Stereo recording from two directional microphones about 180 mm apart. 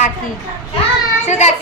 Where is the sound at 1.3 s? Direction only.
40° left (ahead or behind).